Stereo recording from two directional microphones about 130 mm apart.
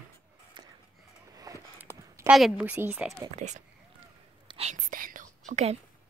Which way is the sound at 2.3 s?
Centre (ahead or behind).